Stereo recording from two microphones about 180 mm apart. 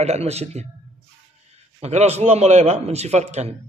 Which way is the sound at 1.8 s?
35° right (ahead or behind).